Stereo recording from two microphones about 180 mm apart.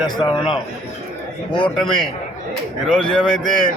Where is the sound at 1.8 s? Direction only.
5° left (ahead or behind).